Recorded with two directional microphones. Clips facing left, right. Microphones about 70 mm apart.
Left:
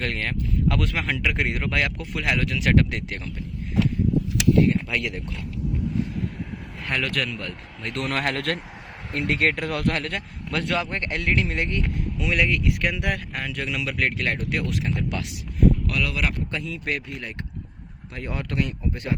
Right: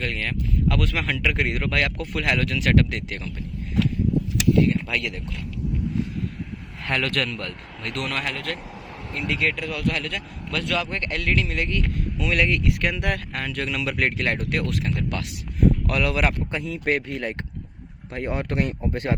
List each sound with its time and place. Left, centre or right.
0.0 s speech: left
4.7 s speech: centre
6.8 s speech: centre
7.9 s speech: left
9.1 s speech: left
12.2 s speech: centre
12.5 s speech: centre
13.9 s speech: centre
15.9 s speech: right